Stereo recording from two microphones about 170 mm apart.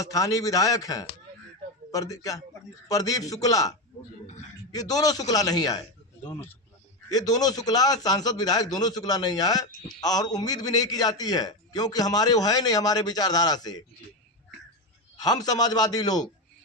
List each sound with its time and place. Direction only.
0.0 s a man's voice: 20° left (ahead or behind)
15.1 s a man's voice: 25° left (ahead or behind)